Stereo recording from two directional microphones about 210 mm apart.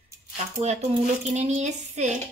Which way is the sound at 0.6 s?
30° right (ahead or behind).